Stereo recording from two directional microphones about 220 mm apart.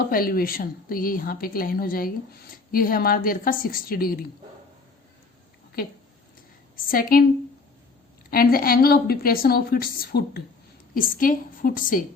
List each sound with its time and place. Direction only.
0.1 s a woman's voice: 40° left (ahead or behind)
6.7 s a woman's voice: 40° left (ahead or behind)
8.3 s a woman's voice: 40° left (ahead or behind)